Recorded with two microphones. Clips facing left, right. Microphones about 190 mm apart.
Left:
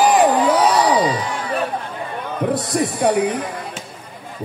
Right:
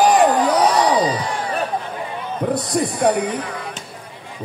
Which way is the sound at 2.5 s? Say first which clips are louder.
Right 1 dB; centre (ahead or behind).